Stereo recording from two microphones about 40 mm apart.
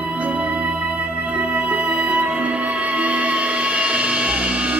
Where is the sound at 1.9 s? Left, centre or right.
Right.